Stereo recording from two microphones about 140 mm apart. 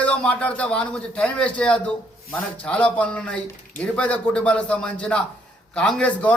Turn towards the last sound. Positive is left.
turn(degrees=10)  # may be behind; listen again after turning